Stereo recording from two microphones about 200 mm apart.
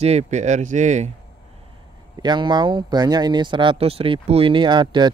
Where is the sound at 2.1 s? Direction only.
20° right (ahead or behind).